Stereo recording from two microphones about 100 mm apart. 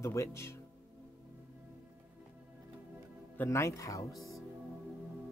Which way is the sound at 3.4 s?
30° left (ahead or behind).